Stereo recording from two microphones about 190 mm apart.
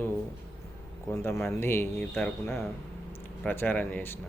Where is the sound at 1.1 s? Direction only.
15° left (ahead or behind).